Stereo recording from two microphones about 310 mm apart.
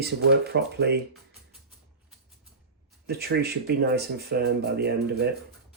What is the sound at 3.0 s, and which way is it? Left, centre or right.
Speech, right.